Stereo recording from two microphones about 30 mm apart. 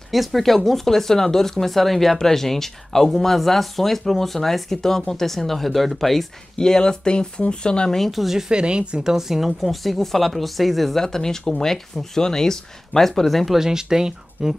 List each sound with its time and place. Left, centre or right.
0.1 s speech: centre
6.6 s speech: left
8.1 s speech: centre
8.5 s speech: right
9.0 s speech: centre
9.5 s speech: centre
11.0 s speech: centre
13.7 s speech: centre